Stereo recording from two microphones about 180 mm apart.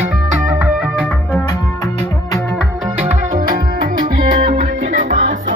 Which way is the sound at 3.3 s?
50° right (ahead or behind).